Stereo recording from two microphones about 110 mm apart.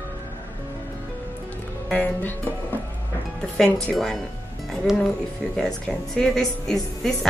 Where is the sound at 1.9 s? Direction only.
15° left (ahead or behind).